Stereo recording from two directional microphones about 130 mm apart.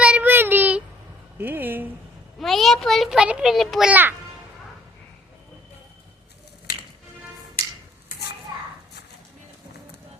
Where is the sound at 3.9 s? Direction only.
15° right (ahead or behind).